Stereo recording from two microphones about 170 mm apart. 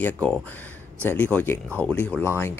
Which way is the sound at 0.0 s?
10° left (ahead or behind).